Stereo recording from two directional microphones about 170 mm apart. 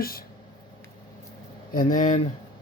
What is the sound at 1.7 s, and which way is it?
Speech, 50° left (ahead or behind).